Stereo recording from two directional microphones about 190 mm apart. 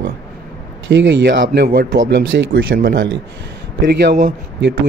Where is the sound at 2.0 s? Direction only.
70° right (ahead or behind).